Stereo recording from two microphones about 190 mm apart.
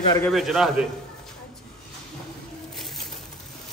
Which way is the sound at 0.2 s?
Centre (ahead or behind).